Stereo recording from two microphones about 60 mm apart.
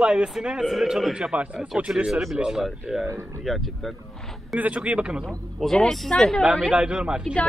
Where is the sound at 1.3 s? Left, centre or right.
Right.